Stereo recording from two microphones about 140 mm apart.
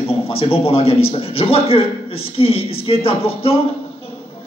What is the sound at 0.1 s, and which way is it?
Speech, 40° left (ahead or behind).